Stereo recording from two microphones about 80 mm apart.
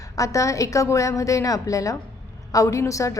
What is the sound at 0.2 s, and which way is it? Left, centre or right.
A woman's voice, left.